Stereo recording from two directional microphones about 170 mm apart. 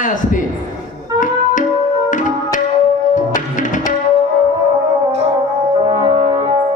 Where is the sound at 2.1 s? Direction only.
50° left (ahead or behind).